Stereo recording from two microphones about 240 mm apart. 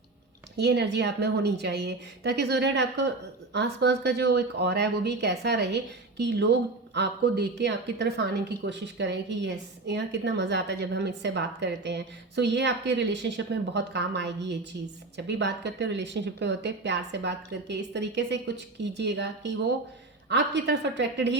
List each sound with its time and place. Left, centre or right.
0.5 s speech: right